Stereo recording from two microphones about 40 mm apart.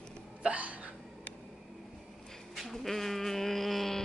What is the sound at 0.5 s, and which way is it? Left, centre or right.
Hiccup, right.